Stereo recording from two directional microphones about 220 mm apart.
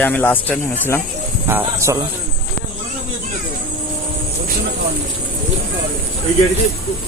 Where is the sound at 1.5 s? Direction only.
10° right (ahead or behind).